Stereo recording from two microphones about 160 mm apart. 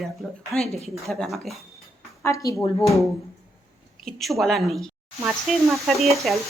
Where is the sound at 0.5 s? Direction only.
Centre (ahead or behind).